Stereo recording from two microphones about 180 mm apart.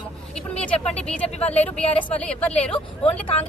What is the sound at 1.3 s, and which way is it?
Speech, 35° left (ahead or behind).